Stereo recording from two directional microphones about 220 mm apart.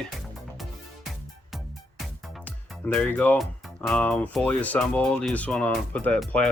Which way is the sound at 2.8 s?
5° left (ahead or behind).